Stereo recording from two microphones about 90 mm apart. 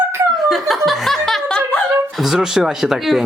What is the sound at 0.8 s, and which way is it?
Snicker, centre (ahead or behind).